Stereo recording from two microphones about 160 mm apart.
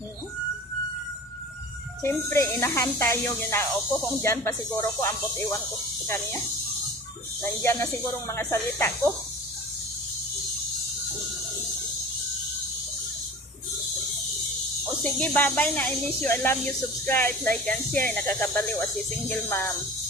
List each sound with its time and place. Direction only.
2.0 s speech: 15° left (ahead or behind)
7.6 s speech: 15° left (ahead or behind)
15.0 s speech: 5° left (ahead or behind)